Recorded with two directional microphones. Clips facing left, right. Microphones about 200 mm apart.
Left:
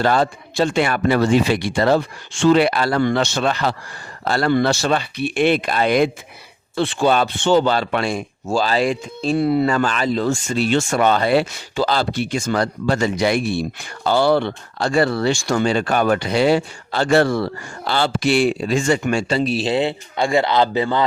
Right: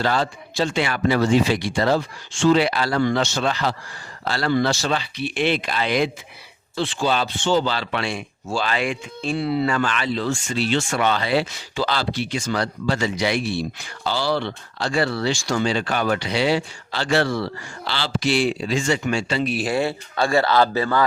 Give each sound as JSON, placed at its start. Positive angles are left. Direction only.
{"t": 0.0, "sound": "speech", "side_deg": 50}
{"t": 19.4, "sound": "a man's voice", "side_deg": 30}